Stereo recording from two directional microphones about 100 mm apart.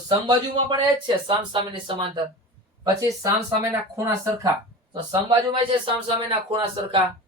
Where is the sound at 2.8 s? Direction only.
35° right (ahead or behind).